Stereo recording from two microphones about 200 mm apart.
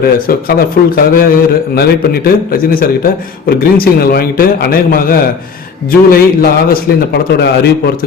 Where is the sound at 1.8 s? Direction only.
50° left (ahead or behind).